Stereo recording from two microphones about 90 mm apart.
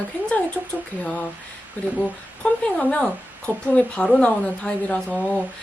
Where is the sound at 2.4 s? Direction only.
15° left (ahead or behind).